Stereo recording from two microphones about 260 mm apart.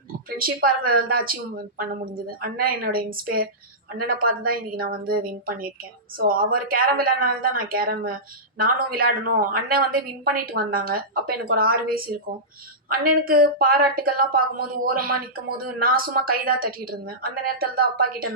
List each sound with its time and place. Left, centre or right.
0.3 s speech: right
13.2 s speech: right